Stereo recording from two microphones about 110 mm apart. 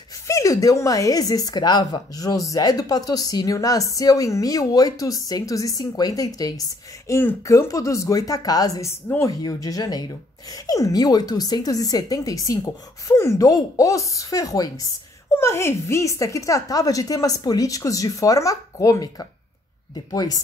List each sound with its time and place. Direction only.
0.3 s speech: 30° left (ahead or behind)